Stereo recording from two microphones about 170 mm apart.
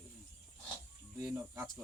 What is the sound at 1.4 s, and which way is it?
Speech, 15° right (ahead or behind).